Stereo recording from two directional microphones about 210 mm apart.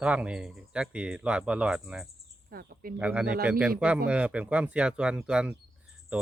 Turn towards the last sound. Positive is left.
turn(degrees=-5)  # may be behind; listen again after turning